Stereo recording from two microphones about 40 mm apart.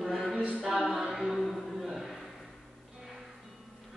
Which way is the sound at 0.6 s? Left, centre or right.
Centre.